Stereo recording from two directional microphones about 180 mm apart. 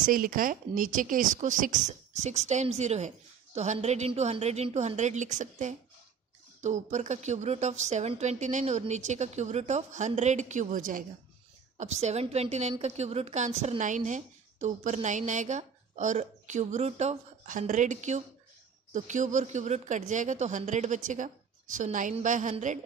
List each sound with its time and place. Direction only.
0.0 s a woman's voice: 50° right (ahead or behind)
11.8 s a woman's voice: 40° right (ahead or behind)